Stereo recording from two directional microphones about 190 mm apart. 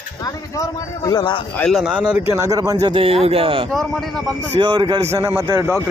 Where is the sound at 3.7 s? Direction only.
Centre (ahead or behind).